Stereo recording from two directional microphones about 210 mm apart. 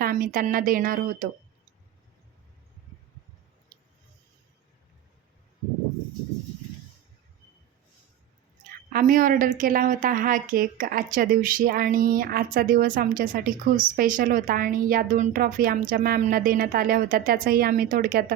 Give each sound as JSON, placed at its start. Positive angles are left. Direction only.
{"t": 0.0, "sound": "a woman's voice", "side_deg": -40}
{"t": 8.9, "sound": "a woman's voice", "side_deg": -40}